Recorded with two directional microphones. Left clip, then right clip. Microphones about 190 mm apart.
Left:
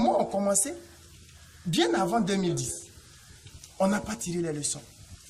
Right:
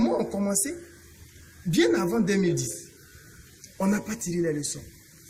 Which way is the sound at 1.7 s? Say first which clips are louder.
Right 3 dB; 25° left (ahead or behind).